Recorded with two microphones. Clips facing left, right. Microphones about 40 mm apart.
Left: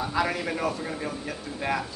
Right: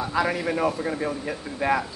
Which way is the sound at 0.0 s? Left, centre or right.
Centre.